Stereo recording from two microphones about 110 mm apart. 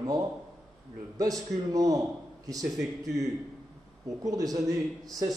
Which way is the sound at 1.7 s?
30° right (ahead or behind).